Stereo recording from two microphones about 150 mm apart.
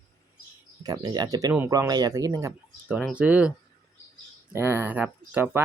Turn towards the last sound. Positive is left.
turn(degrees=-15)  # may be behind; listen again after turning